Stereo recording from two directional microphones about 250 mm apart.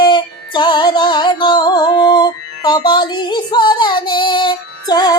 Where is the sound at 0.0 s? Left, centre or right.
Centre.